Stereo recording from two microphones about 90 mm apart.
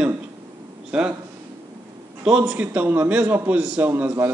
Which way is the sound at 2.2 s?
10° right (ahead or behind).